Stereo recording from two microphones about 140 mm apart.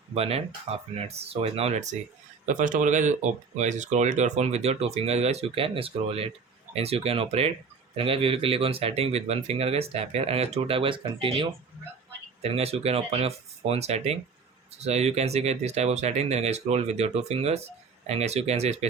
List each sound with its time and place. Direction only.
0.1 s speech: 45° right (ahead or behind)